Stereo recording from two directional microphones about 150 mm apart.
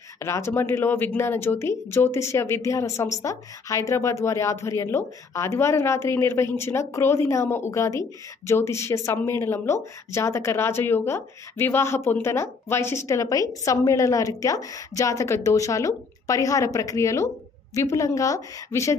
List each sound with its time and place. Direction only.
0.2 s speech: 15° left (ahead or behind)